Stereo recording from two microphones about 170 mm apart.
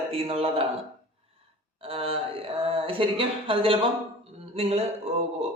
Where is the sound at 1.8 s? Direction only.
35° right (ahead or behind).